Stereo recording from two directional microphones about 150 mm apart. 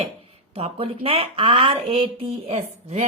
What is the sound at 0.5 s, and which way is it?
A woman's voice, 40° right (ahead or behind).